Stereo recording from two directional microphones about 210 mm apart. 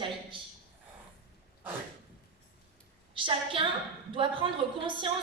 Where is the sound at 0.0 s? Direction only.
25° right (ahead or behind).